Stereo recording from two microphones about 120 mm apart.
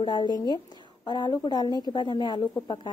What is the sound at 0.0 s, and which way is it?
A woman's voice, 40° left (ahead or behind).